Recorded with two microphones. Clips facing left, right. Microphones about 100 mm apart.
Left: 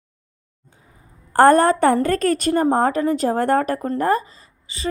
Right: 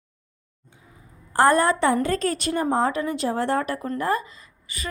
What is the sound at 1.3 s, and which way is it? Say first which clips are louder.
A woman's voice: left 5 dB; 50° left (ahead or behind).